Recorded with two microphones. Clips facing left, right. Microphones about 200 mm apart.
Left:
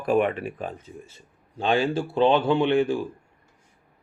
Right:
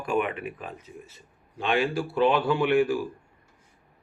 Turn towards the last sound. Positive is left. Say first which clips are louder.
# left 1 dB
turn(degrees=25)  # may be behind; listen again after turning